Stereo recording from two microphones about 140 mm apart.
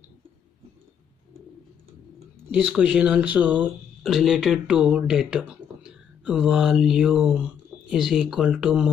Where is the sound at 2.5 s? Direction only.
5° right (ahead or behind).